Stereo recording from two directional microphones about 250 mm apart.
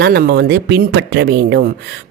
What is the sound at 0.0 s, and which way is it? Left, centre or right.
Speech, right.